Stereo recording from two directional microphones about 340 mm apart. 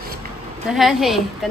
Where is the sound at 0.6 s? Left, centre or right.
Centre.